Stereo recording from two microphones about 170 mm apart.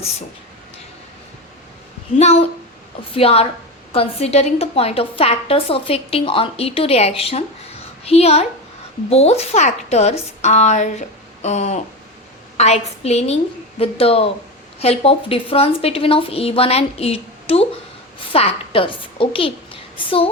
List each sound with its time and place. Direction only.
2.1 s a woman's voice: 40° left (ahead or behind)